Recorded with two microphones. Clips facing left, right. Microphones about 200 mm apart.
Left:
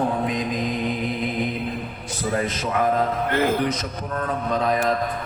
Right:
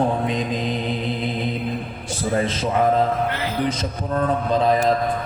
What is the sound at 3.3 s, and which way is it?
Speech, 50° left (ahead or behind).